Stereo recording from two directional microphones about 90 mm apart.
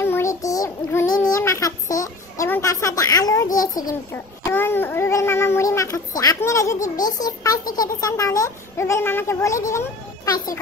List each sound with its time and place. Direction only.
0.0 s child singing: 25° left (ahead or behind)
0.3 s child singing: 40° left (ahead or behind)
1.4 s a sound: 35° left (ahead or behind)
4.1 s a child's voice: 25° left (ahead or behind)